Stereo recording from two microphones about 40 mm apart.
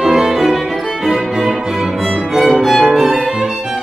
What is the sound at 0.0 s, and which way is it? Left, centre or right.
Violin, centre.